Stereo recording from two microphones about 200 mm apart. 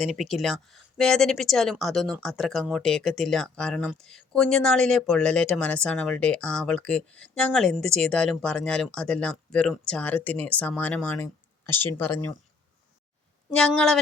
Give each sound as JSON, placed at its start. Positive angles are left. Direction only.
{"t": 0.0, "sound": "speech", "side_deg": 0}
{"t": 13.6, "sound": "speech", "side_deg": 5}